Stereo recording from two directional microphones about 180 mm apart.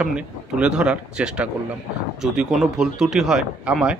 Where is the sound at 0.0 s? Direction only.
5° right (ahead or behind).